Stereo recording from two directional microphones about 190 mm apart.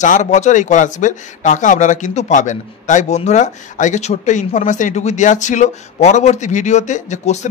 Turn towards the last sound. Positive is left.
turn(degrees=40)  # may be behind; listen again after turning